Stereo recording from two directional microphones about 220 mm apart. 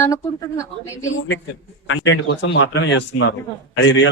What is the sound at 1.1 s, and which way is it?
A man's voice, 55° left (ahead or behind).